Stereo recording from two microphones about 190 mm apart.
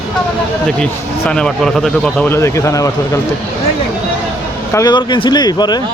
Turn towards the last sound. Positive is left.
turn(degrees=20)  # may be behind; listen again after turning